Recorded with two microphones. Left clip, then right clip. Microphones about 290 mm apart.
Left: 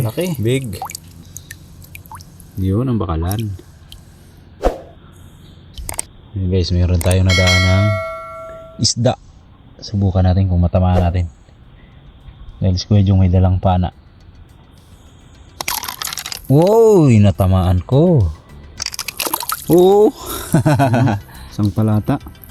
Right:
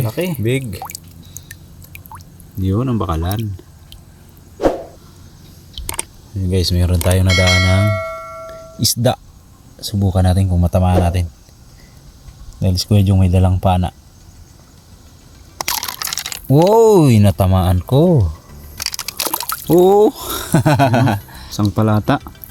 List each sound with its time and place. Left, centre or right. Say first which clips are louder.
0.0 s speech: even; centre
0.8 s speech: left 2 dB; centre
1.5 s drip: left 1 dB; centre
2.6 s speech: even; centre
5.7 s a sound: right 2 dB; centre
6.5 s speech: right 1 dB; centre
12.6 s speech: right 1 dB; centre
15.6 s crunch: right 1 dB; centre
17.1 s speech: even; centre
21.8 s speech: right 4 dB; right